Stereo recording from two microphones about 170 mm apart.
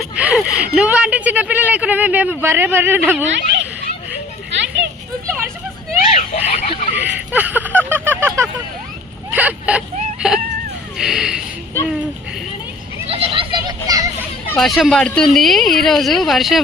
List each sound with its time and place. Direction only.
0.2 s speech: 5° right (ahead or behind)
3.3 s speech: 90° right
6.1 s a sound: 40° left (ahead or behind)
6.9 s a sound: 10° right (ahead or behind)
9.3 s speech: 10° right (ahead or behind)
13.1 s vehicle: 35° right (ahead or behind)
14.5 s speech: centre (ahead or behind)